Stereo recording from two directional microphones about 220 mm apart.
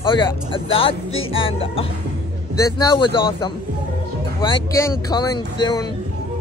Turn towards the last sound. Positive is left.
turn(degrees=20)  # may be behind; listen again after turning